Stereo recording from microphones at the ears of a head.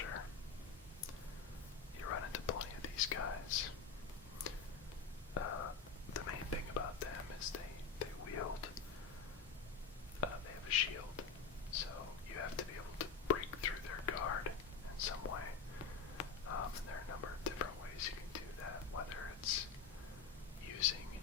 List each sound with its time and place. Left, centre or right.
2.0 s whispering: left
5.3 s whispering: left
10.2 s whispering: left